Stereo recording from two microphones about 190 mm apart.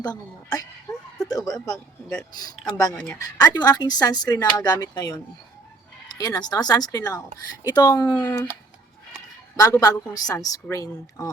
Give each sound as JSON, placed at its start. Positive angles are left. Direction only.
{"t": 0.0, "sound": "speech", "side_deg": 20}
{"t": 0.9, "sound": "a sound", "side_deg": 20}
{"t": 1.3, "sound": "speech", "side_deg": 20}
{"t": 9.6, "sound": "speech", "side_deg": 20}